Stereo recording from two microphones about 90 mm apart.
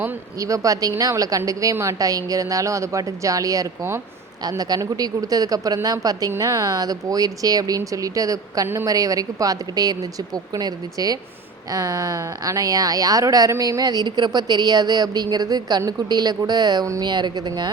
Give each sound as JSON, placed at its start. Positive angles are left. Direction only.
{"t": 0.3, "sound": "speech", "side_deg": -40}
{"t": 8.6, "sound": "a woman's voice", "side_deg": -30}
{"t": 8.9, "sound": "speech", "side_deg": -40}